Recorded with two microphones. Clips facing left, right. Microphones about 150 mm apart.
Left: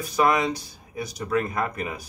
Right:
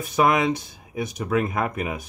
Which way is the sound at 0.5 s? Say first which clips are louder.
Right 4 dB; 25° right (ahead or behind).